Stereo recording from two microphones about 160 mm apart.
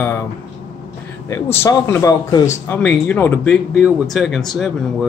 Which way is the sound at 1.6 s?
15° left (ahead or behind).